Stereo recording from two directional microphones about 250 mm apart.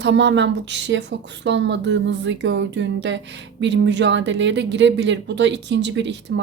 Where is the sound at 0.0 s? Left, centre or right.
Right.